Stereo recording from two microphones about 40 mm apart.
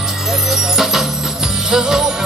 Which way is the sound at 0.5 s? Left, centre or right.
Centre.